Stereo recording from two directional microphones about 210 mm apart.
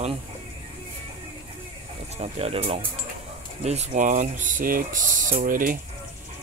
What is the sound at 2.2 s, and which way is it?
Speech, 30° right (ahead or behind).